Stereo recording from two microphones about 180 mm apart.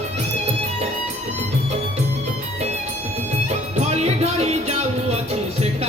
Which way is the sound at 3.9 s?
35° right (ahead or behind).